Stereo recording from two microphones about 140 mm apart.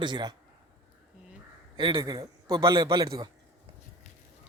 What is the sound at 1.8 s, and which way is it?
A man's voice, 30° right (ahead or behind).